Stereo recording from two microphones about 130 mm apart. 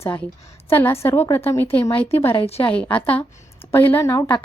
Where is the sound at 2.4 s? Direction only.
50° left (ahead or behind).